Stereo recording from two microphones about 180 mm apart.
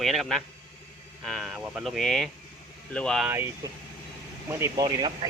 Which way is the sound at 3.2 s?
15° right (ahead or behind).